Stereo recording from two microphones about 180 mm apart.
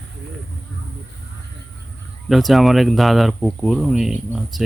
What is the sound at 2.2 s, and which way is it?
Speech, centre (ahead or behind).